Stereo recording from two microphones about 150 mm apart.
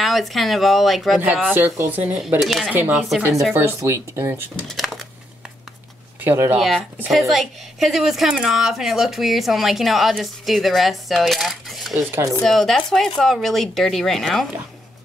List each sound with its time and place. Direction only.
0.0 s speech: centre (ahead or behind)
1.5 s speech: 10° right (ahead or behind)
2.2 s speech: centre (ahead or behind)
2.7 s speech: 10° right (ahead or behind)
4.6 s a sound: centre (ahead or behind)
6.2 s speech: 15° right (ahead or behind)
7.1 s speech: centre (ahead or behind)